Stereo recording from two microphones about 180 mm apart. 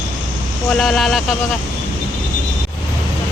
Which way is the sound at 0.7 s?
Centre (ahead or behind).